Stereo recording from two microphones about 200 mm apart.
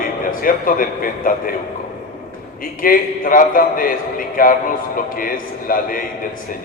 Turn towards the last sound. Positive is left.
turn(degrees=45)  # may be behind; listen again after turning